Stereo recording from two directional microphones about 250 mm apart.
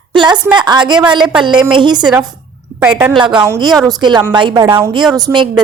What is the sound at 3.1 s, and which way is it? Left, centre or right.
A woman's voice, centre.